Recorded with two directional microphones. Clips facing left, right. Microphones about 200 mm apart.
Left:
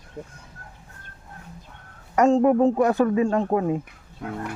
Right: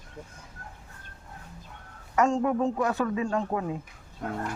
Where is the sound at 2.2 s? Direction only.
35° left (ahead or behind).